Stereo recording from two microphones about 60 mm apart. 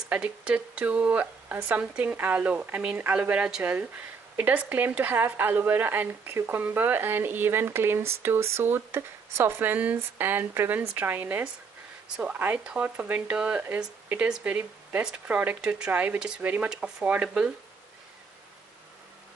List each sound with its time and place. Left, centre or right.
0.1 s speech: centre
1.8 s a woman's voice: right
11.0 s speech: right
16.2 s speech: centre
17.0 s speech: right